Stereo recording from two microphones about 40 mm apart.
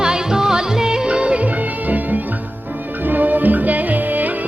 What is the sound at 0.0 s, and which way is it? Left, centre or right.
Music, centre.